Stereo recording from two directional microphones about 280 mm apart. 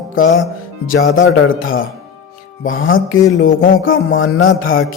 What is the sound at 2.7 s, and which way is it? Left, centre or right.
Mantra, left.